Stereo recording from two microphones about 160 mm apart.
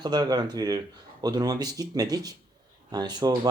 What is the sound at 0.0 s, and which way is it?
Speech, 25° right (ahead or behind).